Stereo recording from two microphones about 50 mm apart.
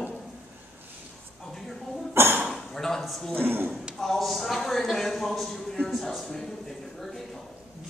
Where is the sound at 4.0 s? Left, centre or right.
Centre.